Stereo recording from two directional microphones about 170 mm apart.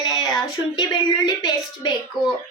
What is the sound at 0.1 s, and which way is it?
Speech, 20° left (ahead or behind).